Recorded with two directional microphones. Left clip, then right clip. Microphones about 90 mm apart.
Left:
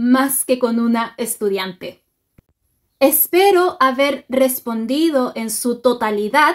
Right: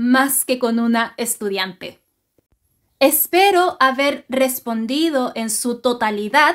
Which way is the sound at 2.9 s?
Centre (ahead or behind).